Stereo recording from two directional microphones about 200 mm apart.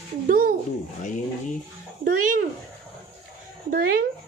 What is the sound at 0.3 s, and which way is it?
Speech, 45° right (ahead or behind).